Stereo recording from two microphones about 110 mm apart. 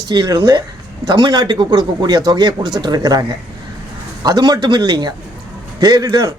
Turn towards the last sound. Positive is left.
turn(degrees=-35)  # may be behind; listen again after turning